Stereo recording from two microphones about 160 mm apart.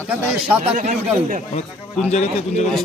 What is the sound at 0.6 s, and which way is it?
Speech, 45° right (ahead or behind).